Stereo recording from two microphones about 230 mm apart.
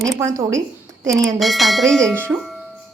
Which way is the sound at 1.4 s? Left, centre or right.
Centre.